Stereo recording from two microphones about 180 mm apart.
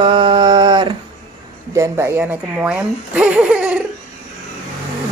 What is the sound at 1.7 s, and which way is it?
Speech, 15° right (ahead or behind).